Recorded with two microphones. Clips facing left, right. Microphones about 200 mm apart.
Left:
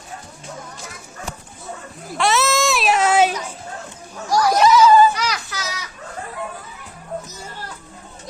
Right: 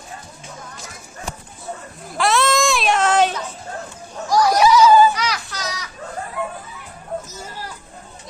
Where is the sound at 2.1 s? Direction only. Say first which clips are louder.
Right 1 dB; centre (ahead or behind).